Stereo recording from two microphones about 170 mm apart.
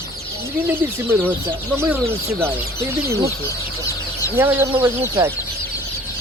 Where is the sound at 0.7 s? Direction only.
10° right (ahead or behind).